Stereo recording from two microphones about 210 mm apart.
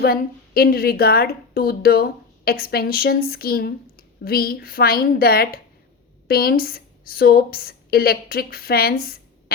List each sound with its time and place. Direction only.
0.0 s a woman's voice: 45° left (ahead or behind)